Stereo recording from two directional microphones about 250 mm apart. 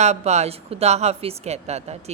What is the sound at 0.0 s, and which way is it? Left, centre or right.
A woman's voice, right.